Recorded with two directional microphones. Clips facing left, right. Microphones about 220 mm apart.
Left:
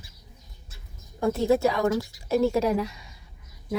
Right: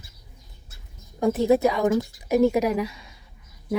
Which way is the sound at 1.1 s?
15° right (ahead or behind).